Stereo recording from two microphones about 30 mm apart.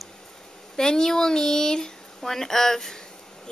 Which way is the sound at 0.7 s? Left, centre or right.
Left.